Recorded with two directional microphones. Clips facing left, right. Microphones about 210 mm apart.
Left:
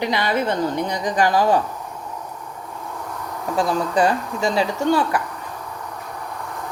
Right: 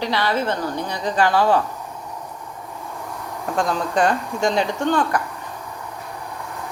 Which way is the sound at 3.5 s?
5° left (ahead or behind).